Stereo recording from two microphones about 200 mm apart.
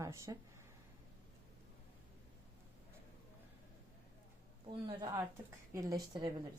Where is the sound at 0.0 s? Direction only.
15° right (ahead or behind).